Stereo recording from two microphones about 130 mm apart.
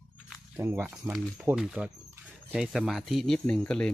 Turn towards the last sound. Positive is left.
turn(degrees=5)  # may be behind; listen again after turning